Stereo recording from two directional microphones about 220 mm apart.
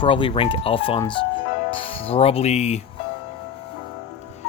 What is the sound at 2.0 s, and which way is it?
Speech, 25° left (ahead or behind).